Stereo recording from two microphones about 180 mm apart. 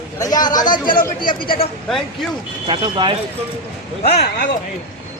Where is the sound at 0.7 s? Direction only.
50° left (ahead or behind).